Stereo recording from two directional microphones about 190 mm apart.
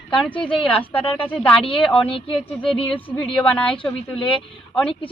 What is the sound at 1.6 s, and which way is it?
Speech, 25° left (ahead or behind).